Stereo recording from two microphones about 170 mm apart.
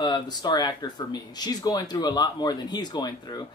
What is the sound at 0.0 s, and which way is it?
Speech, 25° left (ahead or behind).